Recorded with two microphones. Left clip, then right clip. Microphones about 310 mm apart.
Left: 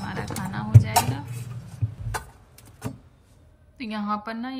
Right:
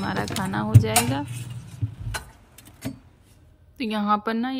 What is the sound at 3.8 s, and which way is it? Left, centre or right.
Speech, centre.